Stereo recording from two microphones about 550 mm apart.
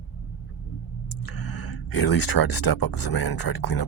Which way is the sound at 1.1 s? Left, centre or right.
Left.